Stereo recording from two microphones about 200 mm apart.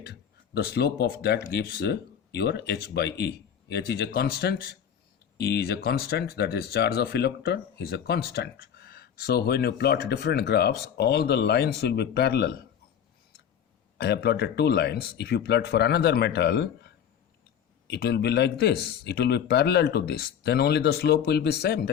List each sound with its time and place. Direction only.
0.0 s speech: 55° left (ahead or behind)
14.0 s speech: 55° left (ahead or behind)